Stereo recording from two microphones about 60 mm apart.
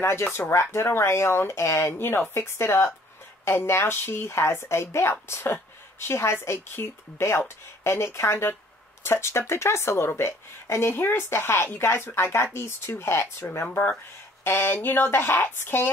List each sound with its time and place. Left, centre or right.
0.0 s speech: left